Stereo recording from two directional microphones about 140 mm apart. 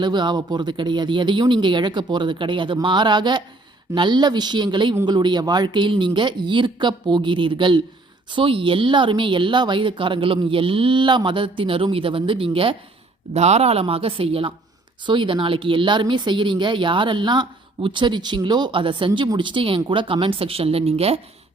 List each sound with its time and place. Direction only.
0.0 s speech: 30° right (ahead or behind)
13.3 s speech: 50° right (ahead or behind)